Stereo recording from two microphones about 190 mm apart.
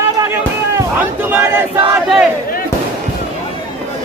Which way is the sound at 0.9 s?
10° right (ahead or behind).